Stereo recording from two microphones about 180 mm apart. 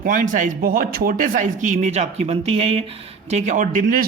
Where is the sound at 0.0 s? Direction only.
45° right (ahead or behind).